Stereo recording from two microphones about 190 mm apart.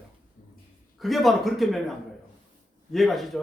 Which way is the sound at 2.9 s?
Centre (ahead or behind).